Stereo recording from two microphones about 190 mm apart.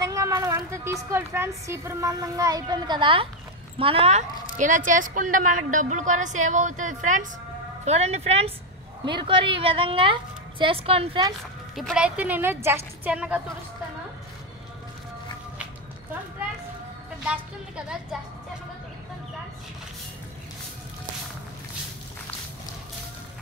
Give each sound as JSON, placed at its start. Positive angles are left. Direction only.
{"t": 0.0, "sound": "a woman's voice", "side_deg": -15}
{"t": 11.7, "sound": "speech", "side_deg": 0}
{"t": 17.3, "sound": "a woman's voice", "side_deg": -5}